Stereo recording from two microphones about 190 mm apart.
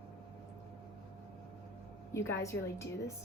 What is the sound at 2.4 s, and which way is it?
Speech, 15° left (ahead or behind).